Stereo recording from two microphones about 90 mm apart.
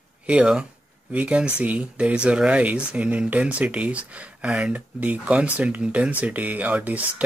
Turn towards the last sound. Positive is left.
turn(degrees=-15)  # may be behind; listen again after turning